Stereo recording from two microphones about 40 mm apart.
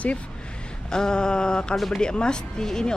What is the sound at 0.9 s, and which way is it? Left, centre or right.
A woman's voice, centre.